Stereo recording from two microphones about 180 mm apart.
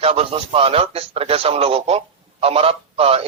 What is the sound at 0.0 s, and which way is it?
A man's voice, 35° right (ahead or behind).